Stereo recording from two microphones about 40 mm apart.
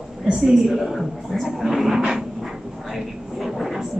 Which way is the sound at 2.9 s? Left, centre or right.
Centre.